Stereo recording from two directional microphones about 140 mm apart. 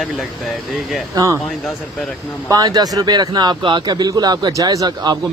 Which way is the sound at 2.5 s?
30° right (ahead or behind).